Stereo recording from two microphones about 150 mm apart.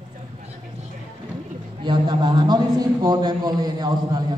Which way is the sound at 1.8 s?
30° right (ahead or behind).